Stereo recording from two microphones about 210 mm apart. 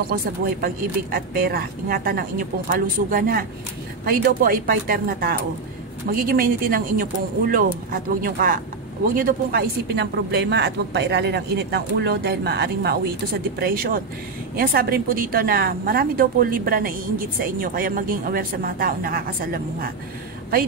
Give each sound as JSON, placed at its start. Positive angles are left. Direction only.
{"t": 1.1, "sound": "a woman's voice", "side_deg": -45}